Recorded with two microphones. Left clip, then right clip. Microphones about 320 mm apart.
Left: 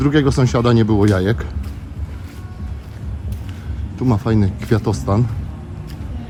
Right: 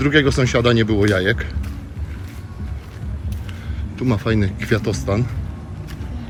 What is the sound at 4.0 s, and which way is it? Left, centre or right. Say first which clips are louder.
Speech: left 1 dB; centre.